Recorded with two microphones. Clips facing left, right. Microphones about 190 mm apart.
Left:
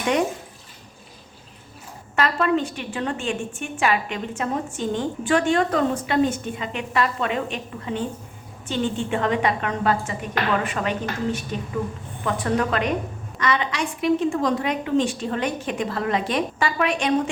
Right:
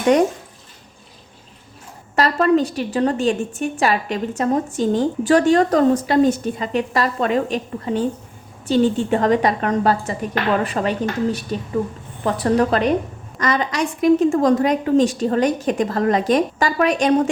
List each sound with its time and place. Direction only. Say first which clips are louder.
2.1 s a woman's voice: right 5 dB; 40° right (ahead or behind)